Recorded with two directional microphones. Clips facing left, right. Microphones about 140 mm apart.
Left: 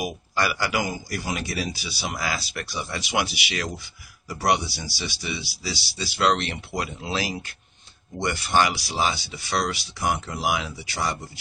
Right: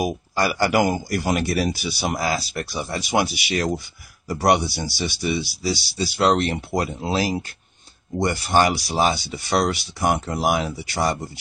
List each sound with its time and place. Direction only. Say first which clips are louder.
0.0 s speech: right 4 dB; 40° right (ahead or behind)
0.7 s speech: right 8 dB; 55° right (ahead or behind)